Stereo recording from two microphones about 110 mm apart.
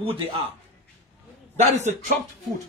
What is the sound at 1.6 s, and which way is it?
Speech, 90° right.